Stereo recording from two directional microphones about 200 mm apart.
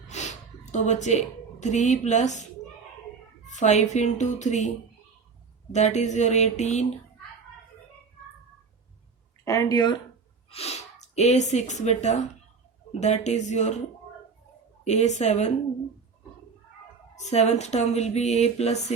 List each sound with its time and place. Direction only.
0.1 s speech: 35° left (ahead or behind)
5.7 s speech: 35° left (ahead or behind)
9.4 s speech: 15° left (ahead or behind)
10.5 s speech: 30° left (ahead or behind)
14.8 s speech: 35° left (ahead or behind)
17.2 s speech: 35° left (ahead or behind)